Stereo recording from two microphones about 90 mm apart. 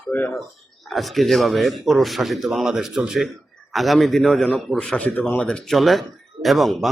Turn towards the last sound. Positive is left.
turn(degrees=0)  # may be behind; listen again after turning